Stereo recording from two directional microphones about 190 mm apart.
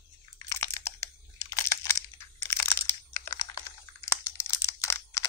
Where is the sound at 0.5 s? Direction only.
15° left (ahead or behind).